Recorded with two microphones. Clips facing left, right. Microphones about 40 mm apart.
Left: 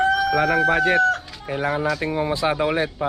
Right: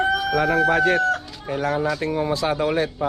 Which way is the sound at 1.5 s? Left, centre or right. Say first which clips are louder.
Even; centre.